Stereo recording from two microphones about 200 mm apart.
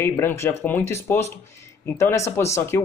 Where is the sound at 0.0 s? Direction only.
10° left (ahead or behind).